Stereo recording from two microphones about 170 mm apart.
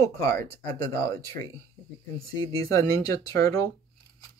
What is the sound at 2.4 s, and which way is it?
Speech, 20° left (ahead or behind).